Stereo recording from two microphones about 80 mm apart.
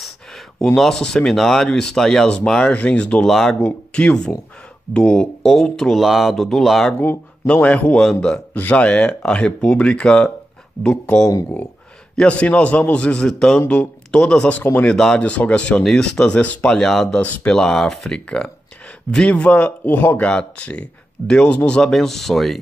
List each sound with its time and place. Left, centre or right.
0.0 s a sound: centre
0.7 s speech: centre
3.3 s speech: centre
7.4 s speech: centre
8.5 s speech: centre
17.2 s speech: centre
17.6 s speech: centre